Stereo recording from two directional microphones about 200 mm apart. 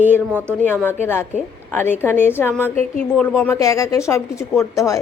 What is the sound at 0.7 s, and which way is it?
A woman's voice, 10° left (ahead or behind).